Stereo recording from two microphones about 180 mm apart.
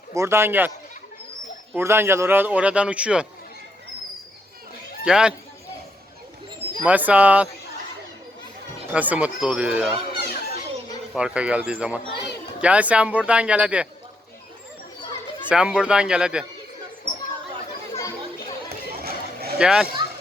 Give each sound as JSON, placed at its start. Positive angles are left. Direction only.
{"t": 0.1, "sound": "a man's voice", "side_deg": -15}
{"t": 1.7, "sound": "a man's voice", "side_deg": -15}
{"t": 5.0, "sound": "a man's voice", "side_deg": -5}
{"t": 6.8, "sound": "a man's voice", "side_deg": -10}
{"t": 8.9, "sound": "a man's voice", "side_deg": -10}
{"t": 10.1, "sound": "children playing", "side_deg": -35}
{"t": 11.1, "sound": "a man's voice", "side_deg": -5}
{"t": 15.4, "sound": "a man's voice", "side_deg": -5}
{"t": 17.9, "sound": "chatter", "side_deg": 20}
{"t": 19.5, "sound": "a man's voice", "side_deg": -5}